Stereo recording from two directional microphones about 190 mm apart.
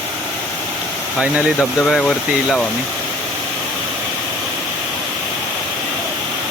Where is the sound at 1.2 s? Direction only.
5° right (ahead or behind).